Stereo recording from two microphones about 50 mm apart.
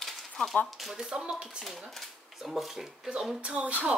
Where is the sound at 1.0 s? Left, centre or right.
Centre.